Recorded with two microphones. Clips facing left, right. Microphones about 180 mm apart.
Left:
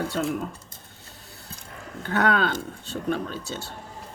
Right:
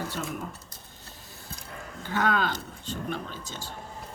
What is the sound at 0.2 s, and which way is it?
Speech, 75° left (ahead or behind).